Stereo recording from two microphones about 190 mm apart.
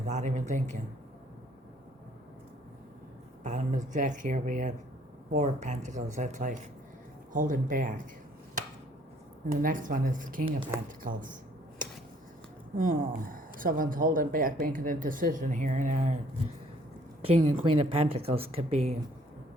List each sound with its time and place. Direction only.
0.1 s speech: 40° right (ahead or behind)
3.4 s speech: 40° right (ahead or behind)
9.5 s speech: 45° right (ahead or behind)
12.7 s speech: 45° right (ahead or behind)
17.2 s speech: 35° right (ahead or behind)